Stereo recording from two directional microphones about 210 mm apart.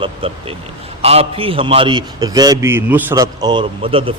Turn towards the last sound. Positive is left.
turn(degrees=-25)  # may be behind; listen again after turning